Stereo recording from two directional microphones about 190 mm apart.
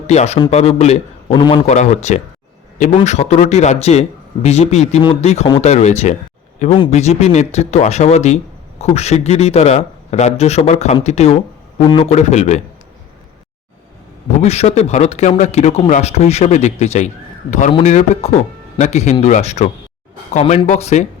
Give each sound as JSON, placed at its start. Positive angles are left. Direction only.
{"t": 0.1, "sound": "speech", "side_deg": 35}
{"t": 1.6, "sound": "speech", "side_deg": 35}
{"t": 14.4, "sound": "speech", "side_deg": 35}